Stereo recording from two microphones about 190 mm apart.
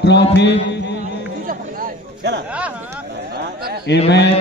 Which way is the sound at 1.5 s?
50° right (ahead or behind).